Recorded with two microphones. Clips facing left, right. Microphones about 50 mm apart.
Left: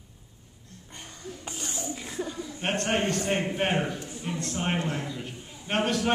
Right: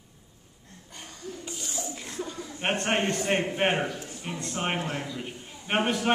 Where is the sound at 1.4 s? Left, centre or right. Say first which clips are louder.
Left 2 dB; left.